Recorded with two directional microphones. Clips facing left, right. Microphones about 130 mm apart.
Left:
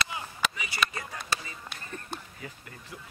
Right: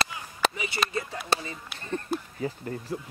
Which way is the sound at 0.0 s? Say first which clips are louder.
Right 4 dB; 35° right (ahead or behind).